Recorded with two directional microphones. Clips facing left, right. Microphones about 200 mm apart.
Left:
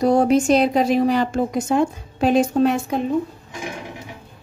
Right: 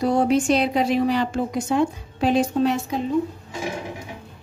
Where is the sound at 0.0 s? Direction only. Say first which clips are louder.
Left 3 dB; 40° left (ahead or behind).